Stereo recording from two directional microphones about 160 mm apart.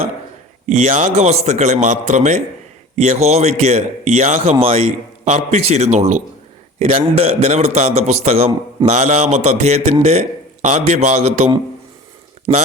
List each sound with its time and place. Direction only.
0.7 s a man's voice: 45° right (ahead or behind)
4.6 s a man's voice: 35° right (ahead or behind)
12.5 s speech: 30° right (ahead or behind)